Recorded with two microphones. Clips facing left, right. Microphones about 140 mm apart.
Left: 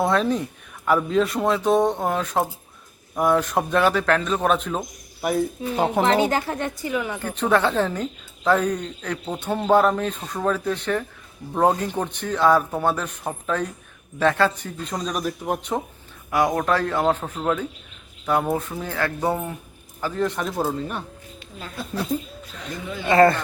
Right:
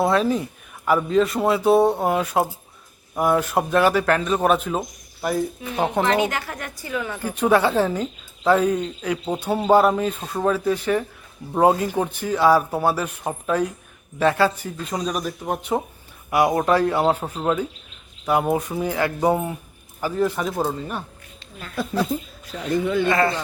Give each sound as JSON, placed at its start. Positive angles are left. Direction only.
{"t": 0.0, "sound": "a man's voice", "side_deg": 0}
{"t": 6.1, "sound": "speech", "side_deg": 30}
{"t": 6.9, "sound": "speech", "side_deg": 15}
{"t": 7.2, "sound": "a man's voice", "side_deg": -10}
{"t": 23.1, "sound": "a man's voice", "side_deg": 45}